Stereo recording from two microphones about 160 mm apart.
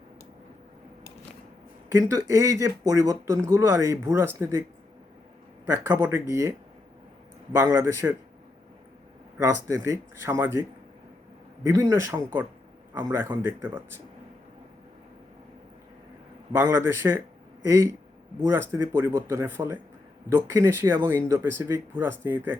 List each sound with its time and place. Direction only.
1.9 s speech: 15° right (ahead or behind)
5.6 s speech: 20° right (ahead or behind)
7.5 s speech: 20° right (ahead or behind)
9.4 s speech: 20° right (ahead or behind)
16.5 s speech: 20° right (ahead or behind)